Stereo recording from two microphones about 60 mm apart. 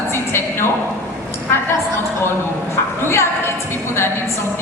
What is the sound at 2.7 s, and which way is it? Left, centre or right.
A woman's voice, left.